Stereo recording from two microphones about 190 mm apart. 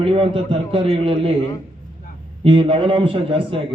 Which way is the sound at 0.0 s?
30° right (ahead or behind).